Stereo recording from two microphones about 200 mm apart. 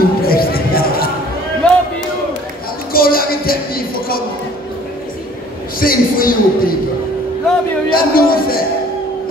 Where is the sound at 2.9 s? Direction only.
45° left (ahead or behind).